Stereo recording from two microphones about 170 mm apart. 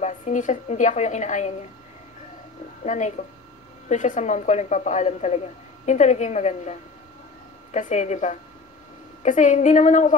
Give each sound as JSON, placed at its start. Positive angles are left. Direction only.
{"t": 0.0, "sound": "speech", "side_deg": 45}
{"t": 2.8, "sound": "speech", "side_deg": 45}